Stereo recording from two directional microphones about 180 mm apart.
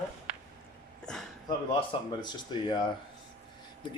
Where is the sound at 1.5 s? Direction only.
25° left (ahead or behind).